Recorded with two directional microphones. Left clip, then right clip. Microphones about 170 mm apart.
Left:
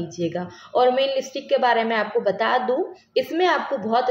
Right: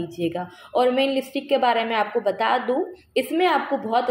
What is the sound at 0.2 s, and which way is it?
A woman's voice, 20° right (ahead or behind).